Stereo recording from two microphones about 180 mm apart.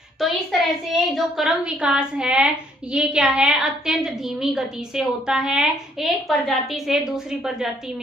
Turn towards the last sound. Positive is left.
turn(degrees=0)  # may be behind; listen again after turning